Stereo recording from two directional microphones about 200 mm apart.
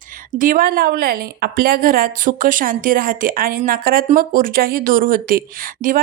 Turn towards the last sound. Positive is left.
turn(degrees=-40)  # may be behind; listen again after turning